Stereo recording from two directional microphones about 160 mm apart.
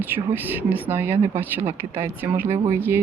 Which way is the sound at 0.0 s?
10° right (ahead or behind).